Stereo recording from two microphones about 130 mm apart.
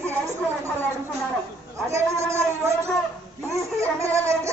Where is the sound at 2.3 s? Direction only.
20° right (ahead or behind).